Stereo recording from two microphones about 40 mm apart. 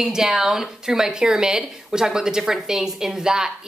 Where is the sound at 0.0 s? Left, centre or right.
Centre.